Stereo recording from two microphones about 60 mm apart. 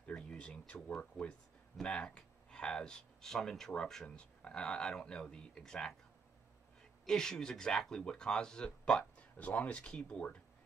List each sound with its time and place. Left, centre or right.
0.0 s a sound: centre
0.9 s speech: centre
7.1 s speech: centre